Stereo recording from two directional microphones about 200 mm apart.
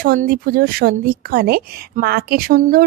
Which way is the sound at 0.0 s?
45° right (ahead or behind).